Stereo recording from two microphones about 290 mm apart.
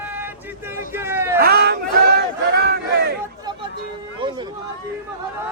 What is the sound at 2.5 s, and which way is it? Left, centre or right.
Crowd, right.